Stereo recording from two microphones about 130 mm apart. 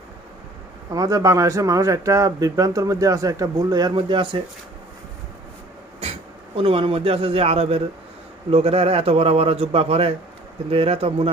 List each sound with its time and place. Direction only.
0.9 s speech: 25° right (ahead or behind)
6.6 s a man's voice: 45° right (ahead or behind)